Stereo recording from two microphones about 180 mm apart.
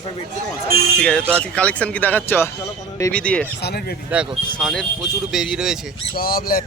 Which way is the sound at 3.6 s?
60° left (ahead or behind).